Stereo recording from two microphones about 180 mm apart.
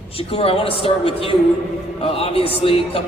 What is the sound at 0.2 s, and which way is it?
A man's voice, 30° left (ahead or behind).